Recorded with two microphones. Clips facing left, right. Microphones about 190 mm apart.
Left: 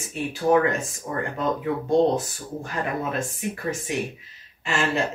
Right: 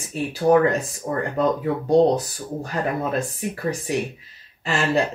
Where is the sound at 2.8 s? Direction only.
35° right (ahead or behind).